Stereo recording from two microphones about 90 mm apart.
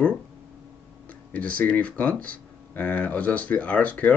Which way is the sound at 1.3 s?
15° left (ahead or behind).